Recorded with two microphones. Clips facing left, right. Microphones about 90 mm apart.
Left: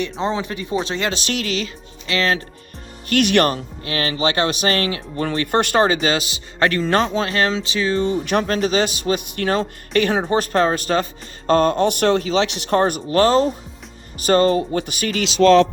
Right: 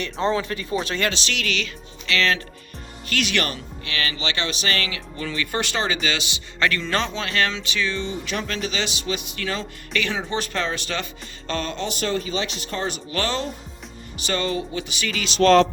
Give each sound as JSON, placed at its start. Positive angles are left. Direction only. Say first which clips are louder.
{"t": 0.0, "sound": "speech", "louder": "left 1 dB", "side_deg": 20}
{"t": 1.1, "sound": "speech", "louder": "left 4 dB", "side_deg": 45}
{"t": 3.1, "sound": "speech", "louder": "left 9 dB", "side_deg": 55}